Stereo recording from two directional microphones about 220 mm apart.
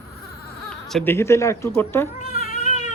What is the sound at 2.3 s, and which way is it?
Cat, 40° left (ahead or behind).